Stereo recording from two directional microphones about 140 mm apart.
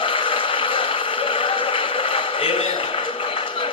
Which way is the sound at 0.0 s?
40° left (ahead or behind).